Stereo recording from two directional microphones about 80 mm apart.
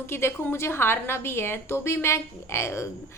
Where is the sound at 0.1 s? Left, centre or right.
Left.